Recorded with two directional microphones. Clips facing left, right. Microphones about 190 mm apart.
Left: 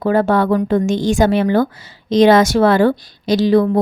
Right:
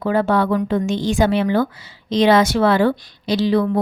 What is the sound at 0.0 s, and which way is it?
A woman's voice, 45° left (ahead or behind).